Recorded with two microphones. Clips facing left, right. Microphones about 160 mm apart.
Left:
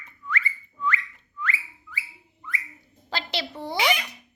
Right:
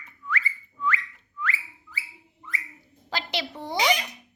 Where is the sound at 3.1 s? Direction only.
10° right (ahead or behind).